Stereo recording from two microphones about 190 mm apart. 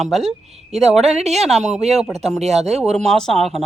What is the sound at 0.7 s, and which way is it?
Speech, 35° right (ahead or behind).